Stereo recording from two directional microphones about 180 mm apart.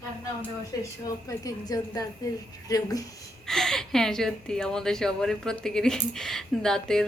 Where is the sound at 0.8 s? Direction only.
20° left (ahead or behind).